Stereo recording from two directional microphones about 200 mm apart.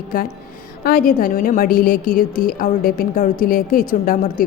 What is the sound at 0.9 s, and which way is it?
A woman's voice, 45° left (ahead or behind).